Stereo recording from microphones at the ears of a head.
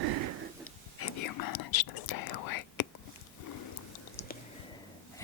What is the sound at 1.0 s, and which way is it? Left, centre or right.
Whispering, left.